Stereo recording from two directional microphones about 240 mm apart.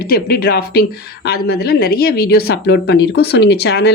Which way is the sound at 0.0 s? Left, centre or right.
Left.